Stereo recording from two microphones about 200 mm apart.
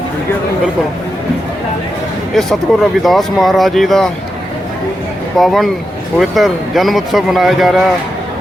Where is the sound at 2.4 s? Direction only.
Centre (ahead or behind).